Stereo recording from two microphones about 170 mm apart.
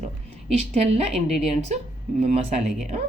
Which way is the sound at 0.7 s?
40° right (ahead or behind).